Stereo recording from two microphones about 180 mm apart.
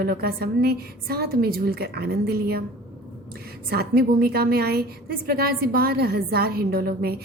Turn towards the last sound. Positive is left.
turn(degrees=-55)  # may be behind; listen again after turning